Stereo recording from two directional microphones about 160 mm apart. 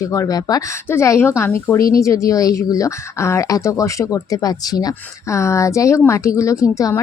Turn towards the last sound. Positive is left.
turn(degrees=20)  # may be behind; listen again after turning